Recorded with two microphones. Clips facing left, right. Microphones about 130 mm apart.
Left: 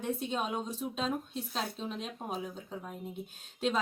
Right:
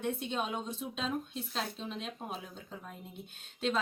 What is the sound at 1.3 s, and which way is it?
Speech, centre (ahead or behind).